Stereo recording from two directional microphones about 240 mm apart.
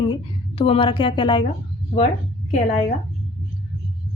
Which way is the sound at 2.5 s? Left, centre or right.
Left.